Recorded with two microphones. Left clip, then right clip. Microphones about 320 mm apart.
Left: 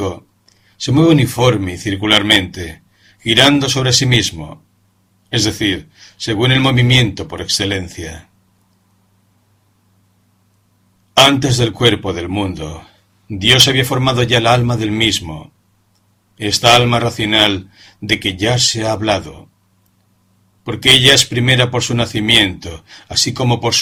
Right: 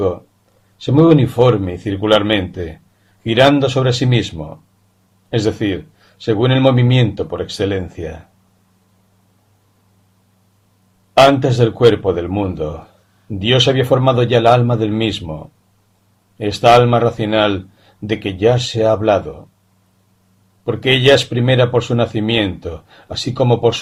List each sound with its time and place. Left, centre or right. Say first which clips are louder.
0.8 s a man's voice: right 1 dB; left
11.3 s a man's voice: right 1 dB; left
16.4 s a man's voice: right 1 dB; left
20.8 s a man's voice: left 3 dB; left